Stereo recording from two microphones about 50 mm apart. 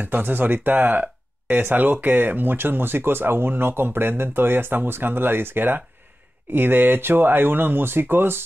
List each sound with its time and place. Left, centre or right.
0.0 s speech: right